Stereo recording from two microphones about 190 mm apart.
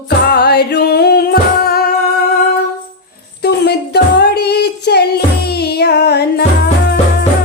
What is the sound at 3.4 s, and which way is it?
Music, 60° left (ahead or behind).